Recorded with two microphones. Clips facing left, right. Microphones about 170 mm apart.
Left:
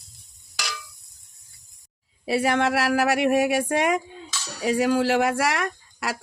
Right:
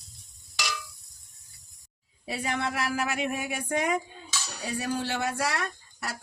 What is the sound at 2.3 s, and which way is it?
Speech, 80° left.